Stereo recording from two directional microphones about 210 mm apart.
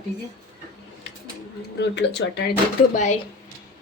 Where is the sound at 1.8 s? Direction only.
55° left (ahead or behind).